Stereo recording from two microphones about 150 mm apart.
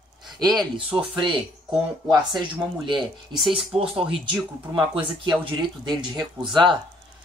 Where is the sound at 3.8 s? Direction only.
35° right (ahead or behind).